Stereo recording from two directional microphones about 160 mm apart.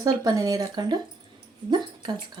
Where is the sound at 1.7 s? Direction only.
30° right (ahead or behind).